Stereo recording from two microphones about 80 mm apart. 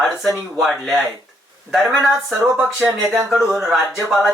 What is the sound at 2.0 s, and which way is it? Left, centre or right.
Speech, centre.